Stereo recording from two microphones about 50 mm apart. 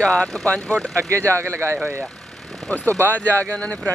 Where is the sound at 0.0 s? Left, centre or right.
Left.